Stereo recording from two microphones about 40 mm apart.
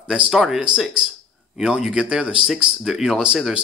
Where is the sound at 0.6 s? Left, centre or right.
Right.